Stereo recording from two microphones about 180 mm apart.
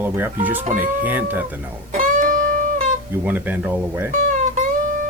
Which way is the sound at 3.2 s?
10° right (ahead or behind).